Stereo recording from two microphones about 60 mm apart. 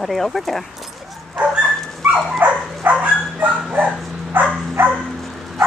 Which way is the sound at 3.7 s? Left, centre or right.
Right.